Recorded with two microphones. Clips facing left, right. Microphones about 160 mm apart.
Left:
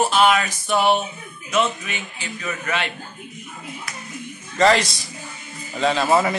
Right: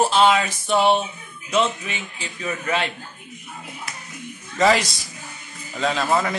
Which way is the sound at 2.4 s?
30° right (ahead or behind).